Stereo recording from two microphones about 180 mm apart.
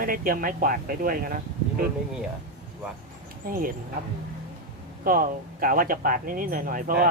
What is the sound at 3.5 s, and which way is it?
Speech, 55° right (ahead or behind).